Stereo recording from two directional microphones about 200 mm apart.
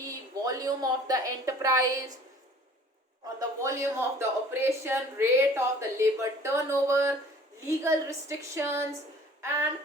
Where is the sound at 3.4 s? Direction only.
15° right (ahead or behind).